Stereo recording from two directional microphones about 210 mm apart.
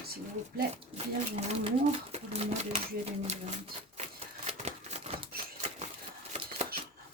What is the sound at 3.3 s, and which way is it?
Typewriter, 30° right (ahead or behind).